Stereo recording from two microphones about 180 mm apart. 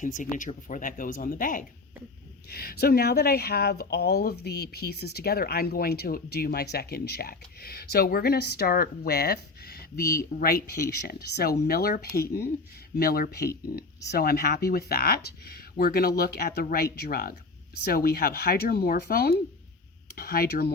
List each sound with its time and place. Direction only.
0.0 s speech: 45° left (ahead or behind)